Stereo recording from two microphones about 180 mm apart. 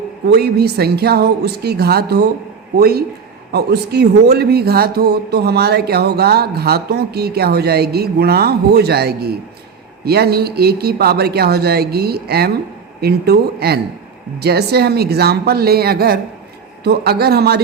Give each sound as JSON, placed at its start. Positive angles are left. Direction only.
{"t": 0.3, "sound": "a man's voice", "side_deg": -65}